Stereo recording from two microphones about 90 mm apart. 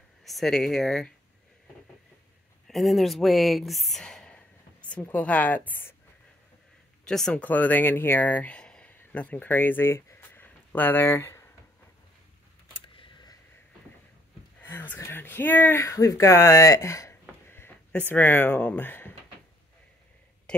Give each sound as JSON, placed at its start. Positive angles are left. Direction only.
{"t": 0.2, "sound": "a woman's voice", "side_deg": 0}
{"t": 2.7, "sound": "a woman's voice", "side_deg": 0}
{"t": 4.0, "sound": "a sound", "side_deg": 10}
{"t": 5.1, "sound": "a woman's voice", "side_deg": 15}
{"t": 7.1, "sound": "a woman's voice", "side_deg": 5}
{"t": 7.4, "sound": "speech", "side_deg": 20}
{"t": 12.8, "sound": "a sound", "side_deg": 70}
{"t": 14.6, "sound": "speech", "side_deg": 25}